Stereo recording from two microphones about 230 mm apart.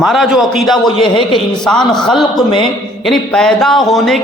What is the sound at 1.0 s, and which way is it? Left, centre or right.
Speech, left.